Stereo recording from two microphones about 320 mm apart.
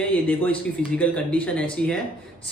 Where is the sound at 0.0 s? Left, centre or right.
Centre.